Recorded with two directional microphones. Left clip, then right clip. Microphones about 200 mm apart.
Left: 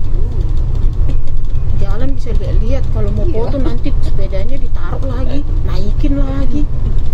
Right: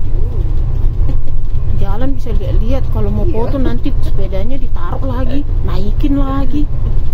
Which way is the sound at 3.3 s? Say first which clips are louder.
Right 1 dB; 20° right (ahead or behind).